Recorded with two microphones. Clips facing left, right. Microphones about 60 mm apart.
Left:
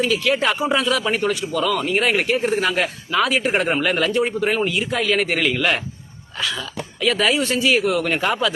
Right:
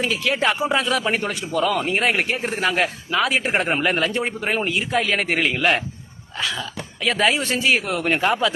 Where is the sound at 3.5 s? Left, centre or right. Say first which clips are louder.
Left 1 dB; centre.